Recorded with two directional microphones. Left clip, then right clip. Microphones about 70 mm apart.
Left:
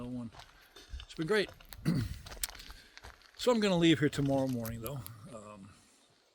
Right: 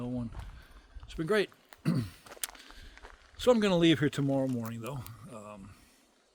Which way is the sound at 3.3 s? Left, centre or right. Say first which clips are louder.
Right 4 dB; right.